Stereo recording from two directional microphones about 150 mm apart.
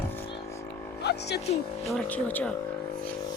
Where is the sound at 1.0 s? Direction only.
90° left.